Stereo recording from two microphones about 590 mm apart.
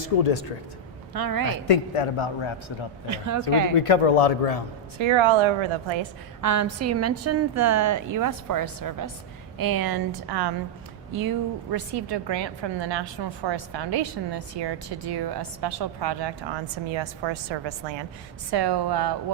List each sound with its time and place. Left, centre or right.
0.0 s speech: left
1.1 s a woman's voice: right
1.6 s a man's voice: left
3.1 s a woman's voice: right
3.8 s speech: left
4.9 s a woman's voice: right
6.4 s a woman's voice: right